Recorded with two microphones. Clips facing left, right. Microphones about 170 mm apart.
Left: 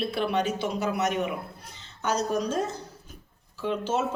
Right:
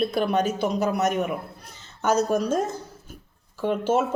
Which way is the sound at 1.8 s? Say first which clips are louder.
Right 6 dB; 45° right (ahead or behind).